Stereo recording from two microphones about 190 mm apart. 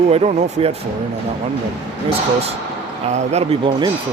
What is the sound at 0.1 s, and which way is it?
Speech, 35° right (ahead or behind).